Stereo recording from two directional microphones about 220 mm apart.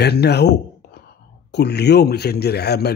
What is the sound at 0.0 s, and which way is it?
Speech, 50° left (ahead or behind).